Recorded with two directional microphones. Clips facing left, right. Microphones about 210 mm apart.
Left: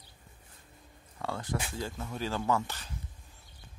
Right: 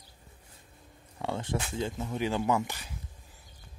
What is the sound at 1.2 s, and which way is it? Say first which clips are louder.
Speech: right 2 dB; 25° right (ahead or behind).